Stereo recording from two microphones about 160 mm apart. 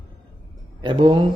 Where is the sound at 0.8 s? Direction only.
30° right (ahead or behind).